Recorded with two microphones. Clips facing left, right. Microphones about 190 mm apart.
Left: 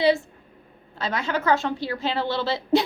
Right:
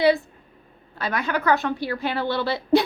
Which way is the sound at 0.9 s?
25° left (ahead or behind).